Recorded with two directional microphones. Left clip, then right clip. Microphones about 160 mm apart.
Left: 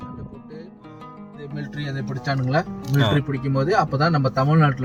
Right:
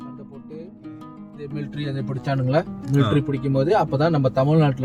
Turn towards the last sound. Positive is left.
turn(degrees=-25)  # may be behind; listen again after turning